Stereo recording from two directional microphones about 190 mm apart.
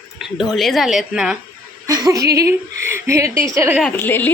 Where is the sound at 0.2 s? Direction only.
Centre (ahead or behind).